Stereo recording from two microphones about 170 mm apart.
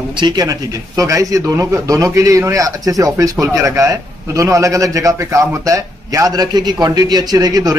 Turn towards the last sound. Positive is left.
turn(degrees=-20)  # may be behind; listen again after turning